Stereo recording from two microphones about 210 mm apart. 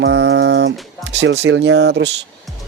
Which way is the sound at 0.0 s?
60° right (ahead or behind).